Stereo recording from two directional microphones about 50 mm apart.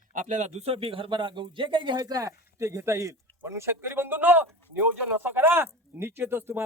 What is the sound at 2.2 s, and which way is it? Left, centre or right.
Speech, right.